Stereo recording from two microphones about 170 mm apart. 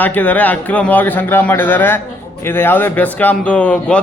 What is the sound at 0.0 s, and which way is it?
A man's voice, 10° left (ahead or behind).